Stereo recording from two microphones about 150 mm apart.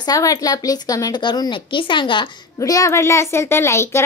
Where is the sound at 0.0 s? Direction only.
25° left (ahead or behind).